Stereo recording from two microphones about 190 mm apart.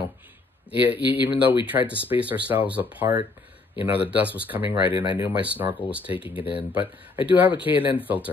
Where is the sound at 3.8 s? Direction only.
30° left (ahead or behind).